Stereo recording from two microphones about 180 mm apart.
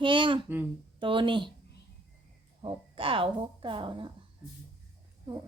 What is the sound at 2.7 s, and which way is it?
Speech, 30° right (ahead or behind).